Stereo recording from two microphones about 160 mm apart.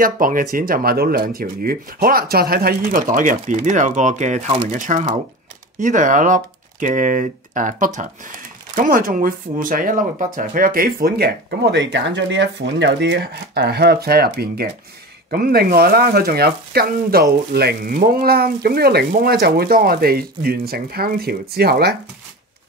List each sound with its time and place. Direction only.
0.0 s speech: 60° right (ahead or behind); by 13.9 s 90° right
14.0 s speech: 75° right (ahead or behind)